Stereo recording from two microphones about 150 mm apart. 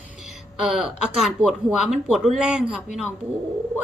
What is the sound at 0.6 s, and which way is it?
A woman's voice, 5° right (ahead or behind).